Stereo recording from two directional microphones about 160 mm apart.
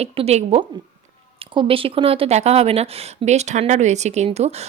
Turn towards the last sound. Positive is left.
turn(degrees=-40)  # may be behind; listen again after turning